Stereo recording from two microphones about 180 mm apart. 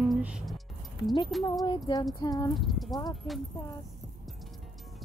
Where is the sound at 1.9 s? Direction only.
25° left (ahead or behind).